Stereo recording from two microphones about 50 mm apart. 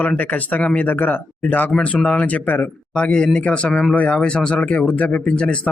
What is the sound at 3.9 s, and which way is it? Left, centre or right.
Speech, left.